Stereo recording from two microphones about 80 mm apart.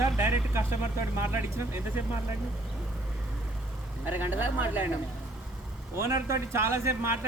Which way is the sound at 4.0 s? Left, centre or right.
Right.